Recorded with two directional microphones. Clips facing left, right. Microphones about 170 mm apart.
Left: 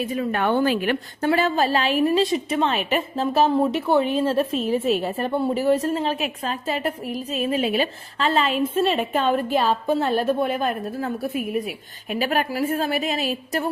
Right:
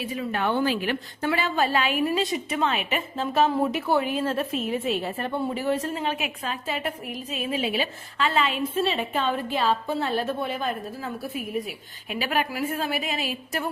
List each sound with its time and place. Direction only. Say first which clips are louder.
0.0 s a woman's voice: left 4 dB; 50° left (ahead or behind)
1.2 s a woman's voice: left 4 dB; 45° left (ahead or behind)